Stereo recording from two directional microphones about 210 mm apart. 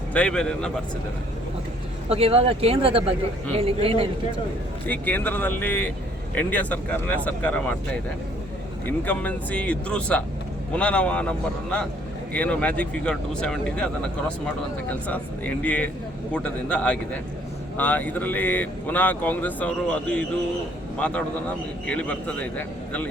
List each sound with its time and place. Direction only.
0.1 s speech: 5° left (ahead or behind)
2.0 s speech: 30° right (ahead or behind)
4.9 s speech: 10° left (ahead or behind)
8.9 s speech: 10° left (ahead or behind)